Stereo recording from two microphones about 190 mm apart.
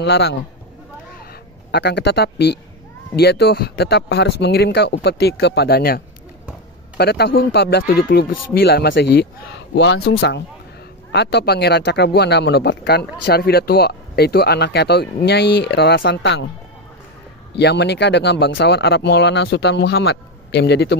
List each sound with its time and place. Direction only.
0.0 s speech: 60° left (ahead or behind)
1.7 s speech: 60° left (ahead or behind)
17.6 s speech: 60° left (ahead or behind)